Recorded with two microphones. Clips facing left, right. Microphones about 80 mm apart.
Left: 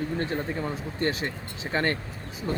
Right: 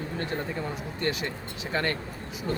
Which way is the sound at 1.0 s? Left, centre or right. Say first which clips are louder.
Left 2 dB; left.